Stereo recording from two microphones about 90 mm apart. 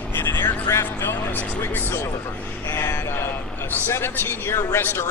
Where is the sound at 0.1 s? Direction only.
25° left (ahead or behind).